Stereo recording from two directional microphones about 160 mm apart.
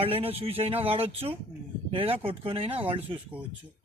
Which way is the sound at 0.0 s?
35° right (ahead or behind).